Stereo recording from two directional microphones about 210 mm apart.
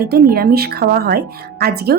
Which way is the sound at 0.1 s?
45° right (ahead or behind).